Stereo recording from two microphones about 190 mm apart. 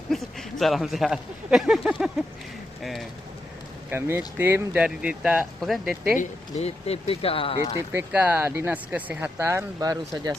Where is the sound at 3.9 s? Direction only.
10° right (ahead or behind).